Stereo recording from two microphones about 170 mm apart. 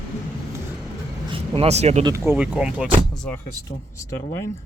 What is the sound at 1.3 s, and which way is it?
Speech, 35° right (ahead or behind).